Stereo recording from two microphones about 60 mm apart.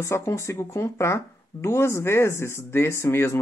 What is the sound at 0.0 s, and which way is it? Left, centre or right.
Speech, left.